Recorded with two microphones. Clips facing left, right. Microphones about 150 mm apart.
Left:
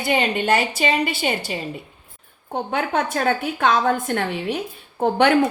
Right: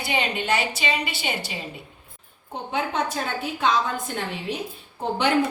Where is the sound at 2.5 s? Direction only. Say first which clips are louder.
Left 4 dB; 55° left (ahead or behind).